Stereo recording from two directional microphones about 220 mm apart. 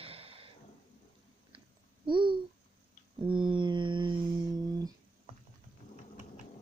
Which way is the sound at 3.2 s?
20° right (ahead or behind).